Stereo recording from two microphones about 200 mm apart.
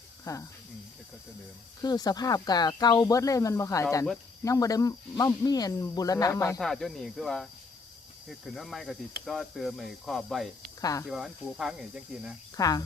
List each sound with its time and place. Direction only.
0.3 s speech: 15° left (ahead or behind)
1.8 s speech: 20° left (ahead or behind)
6.6 s speech: centre (ahead or behind)
10.8 s speech: 15° left (ahead or behind)
11.0 s speech: centre (ahead or behind)
12.5 s speech: 20° left (ahead or behind)